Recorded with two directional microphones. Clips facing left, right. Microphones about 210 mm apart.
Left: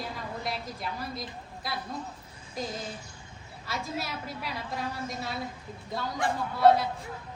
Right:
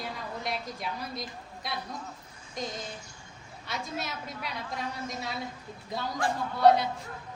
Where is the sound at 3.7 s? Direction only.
5° left (ahead or behind).